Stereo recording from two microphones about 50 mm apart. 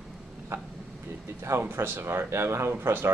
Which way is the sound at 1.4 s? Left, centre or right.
Right.